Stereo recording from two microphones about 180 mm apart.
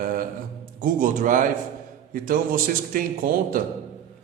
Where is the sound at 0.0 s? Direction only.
50° right (ahead or behind).